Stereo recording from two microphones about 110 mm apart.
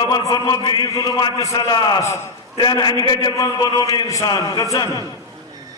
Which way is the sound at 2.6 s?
40° left (ahead or behind).